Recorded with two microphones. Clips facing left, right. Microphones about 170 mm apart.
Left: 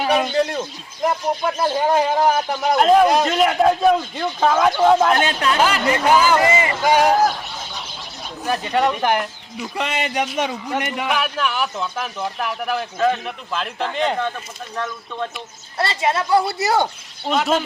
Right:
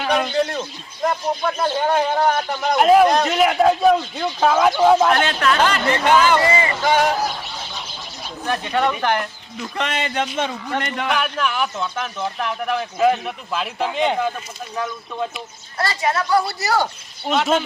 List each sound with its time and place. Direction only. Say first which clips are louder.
0.0 s speech: left 1 dB; 5° left (ahead or behind)
2.7 s a man's voice: right 1 dB; 5° right (ahead or behind)
5.1 s speech: even; 15° left (ahead or behind)
6.4 s speech: left 1 dB; 15° left (ahead or behind)
7.6 s a sound: even; centre (ahead or behind)
8.4 s a man's voice: left 1 dB; 10° left (ahead or behind)
15.8 s a woman's voice: left 1 dB; 25° left (ahead or behind)
17.2 s a man's voice: even; centre (ahead or behind)